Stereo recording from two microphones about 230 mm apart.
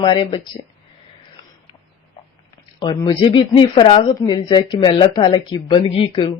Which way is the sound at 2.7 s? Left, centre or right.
Centre.